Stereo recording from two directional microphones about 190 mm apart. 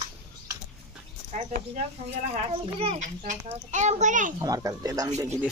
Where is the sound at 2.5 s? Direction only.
30° right (ahead or behind).